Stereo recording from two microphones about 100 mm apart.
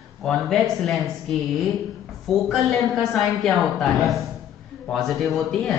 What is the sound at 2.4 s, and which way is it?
Speech, centre (ahead or behind).